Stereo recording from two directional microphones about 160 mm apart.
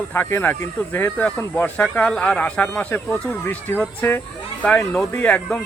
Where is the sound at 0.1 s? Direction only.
15° left (ahead or behind).